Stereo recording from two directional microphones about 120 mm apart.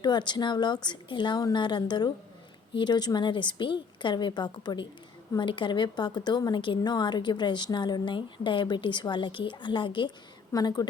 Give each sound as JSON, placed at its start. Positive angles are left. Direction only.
{"t": 0.0, "sound": "a woman's voice", "side_deg": 40}